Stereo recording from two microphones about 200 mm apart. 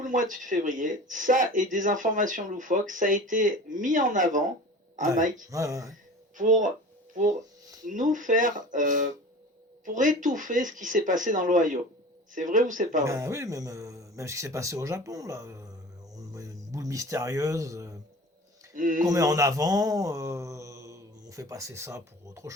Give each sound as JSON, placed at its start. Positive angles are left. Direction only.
{"t": 0.0, "sound": "speech", "side_deg": -40}
{"t": 5.5, "sound": "speech", "side_deg": -15}
{"t": 6.3, "sound": "speech", "side_deg": -40}
{"t": 13.1, "sound": "speech", "side_deg": -15}
{"t": 16.1, "sound": "a sound", "side_deg": -15}
{"t": 18.7, "sound": "speech", "side_deg": -40}
{"t": 19.0, "sound": "speech", "side_deg": -20}